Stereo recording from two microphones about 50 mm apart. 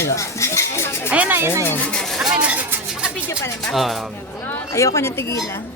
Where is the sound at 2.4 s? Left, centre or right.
Right.